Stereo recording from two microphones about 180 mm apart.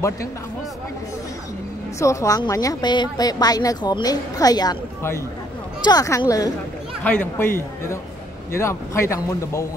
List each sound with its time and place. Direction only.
2.0 s a woman's voice: 15° left (ahead or behind)
7.0 s speech: 10° left (ahead or behind)